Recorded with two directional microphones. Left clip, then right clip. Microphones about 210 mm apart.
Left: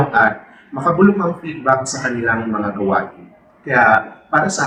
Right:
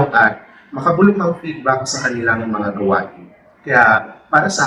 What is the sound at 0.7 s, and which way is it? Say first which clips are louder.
A man's voice: even; 10° left (ahead or behind).